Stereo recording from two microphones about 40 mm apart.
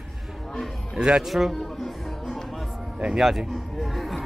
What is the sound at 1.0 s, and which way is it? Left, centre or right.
Speech, right.